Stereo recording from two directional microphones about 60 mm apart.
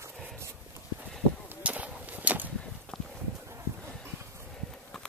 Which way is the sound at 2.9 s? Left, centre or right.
Centre.